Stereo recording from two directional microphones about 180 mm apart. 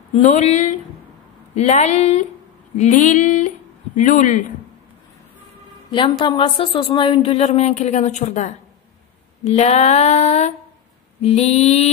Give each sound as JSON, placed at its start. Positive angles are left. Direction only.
{"t": 0.1, "sound": "a woman's voice", "side_deg": 40}
{"t": 5.9, "sound": "speech", "side_deg": 25}